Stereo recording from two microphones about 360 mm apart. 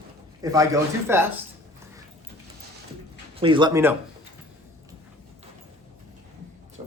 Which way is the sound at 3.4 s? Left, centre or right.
Centre.